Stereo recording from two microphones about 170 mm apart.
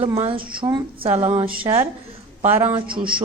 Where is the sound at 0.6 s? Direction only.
30° right (ahead or behind).